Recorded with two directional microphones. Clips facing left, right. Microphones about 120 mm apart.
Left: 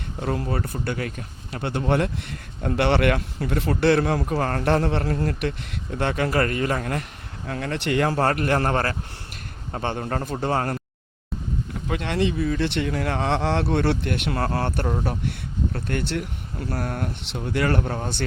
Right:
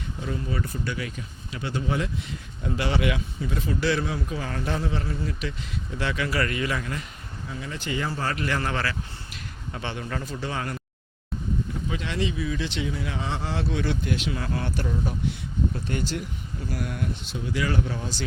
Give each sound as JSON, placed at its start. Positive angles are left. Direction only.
{"t": 0.2, "sound": "speech", "side_deg": 55}
{"t": 7.4, "sound": "speech", "side_deg": 65}
{"t": 11.9, "sound": "speech", "side_deg": 55}